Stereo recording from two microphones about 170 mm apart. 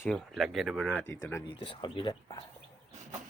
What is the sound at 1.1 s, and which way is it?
Speech, 15° left (ahead or behind).